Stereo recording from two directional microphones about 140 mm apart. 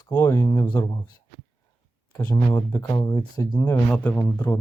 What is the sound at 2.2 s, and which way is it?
Speech, 15° left (ahead or behind).